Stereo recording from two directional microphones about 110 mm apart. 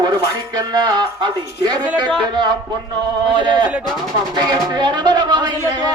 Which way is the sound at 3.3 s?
45° right (ahead or behind).